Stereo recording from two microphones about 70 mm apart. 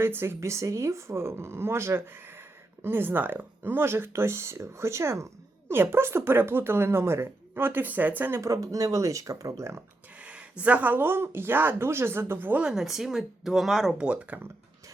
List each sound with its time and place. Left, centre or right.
0.0 s speech: right
8.4 s speech: right
10.2 s speech: centre
12.6 s speech: centre
14.0 s speech: centre